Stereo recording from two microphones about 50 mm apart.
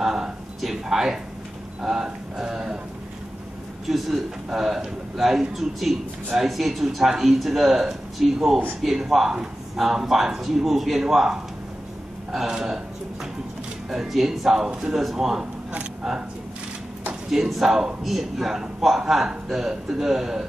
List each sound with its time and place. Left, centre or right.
0.0 s a sound: centre
1.8 s a man's voice: centre
3.8 s a man's voice: centre
17.3 s a man's voice: centre